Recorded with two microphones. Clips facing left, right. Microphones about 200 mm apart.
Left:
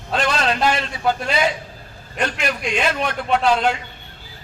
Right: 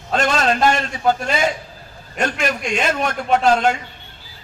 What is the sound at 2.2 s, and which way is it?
A man's voice, 45° right (ahead or behind).